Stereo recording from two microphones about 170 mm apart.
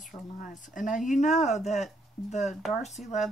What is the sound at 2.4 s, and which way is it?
Speech, centre (ahead or behind).